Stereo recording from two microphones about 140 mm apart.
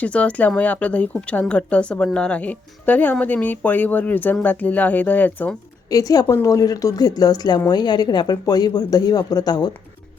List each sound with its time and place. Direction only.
0.0 s speech: 10° left (ahead or behind)
5.9 s speech: 25° left (ahead or behind)